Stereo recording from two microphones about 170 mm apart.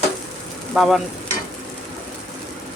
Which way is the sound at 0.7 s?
Centre (ahead or behind).